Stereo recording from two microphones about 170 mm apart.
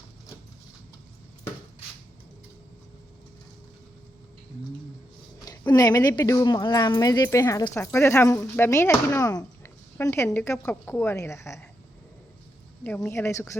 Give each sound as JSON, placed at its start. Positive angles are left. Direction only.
{"t": 5.5, "sound": "speech", "side_deg": 20}
{"t": 12.8, "sound": "speech", "side_deg": 10}